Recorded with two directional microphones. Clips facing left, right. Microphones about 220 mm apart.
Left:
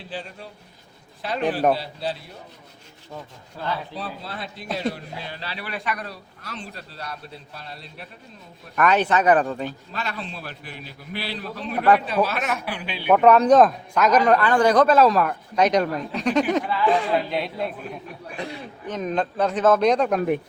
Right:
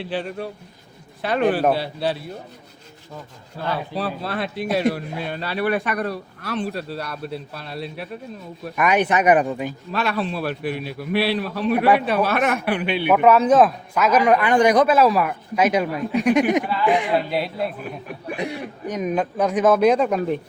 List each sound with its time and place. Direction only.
0.0 s a man's voice: 65° right (ahead or behind)
3.9 s a man's voice: 70° right (ahead or behind)
8.7 s speech: 10° right (ahead or behind)
9.9 s a man's voice: 65° right (ahead or behind)
13.1 s speech: 5° right (ahead or behind)
17.3 s a man's voice: 5° right (ahead or behind)
18.3 s speech: 15° right (ahead or behind)